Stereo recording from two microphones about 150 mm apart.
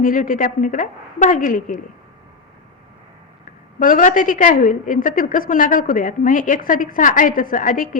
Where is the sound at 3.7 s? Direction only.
65° left (ahead or behind).